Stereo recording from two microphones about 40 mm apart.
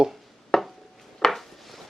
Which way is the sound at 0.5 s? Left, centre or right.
Centre.